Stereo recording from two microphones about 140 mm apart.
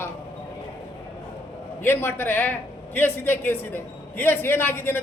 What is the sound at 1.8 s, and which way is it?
A man's voice, 15° left (ahead or behind).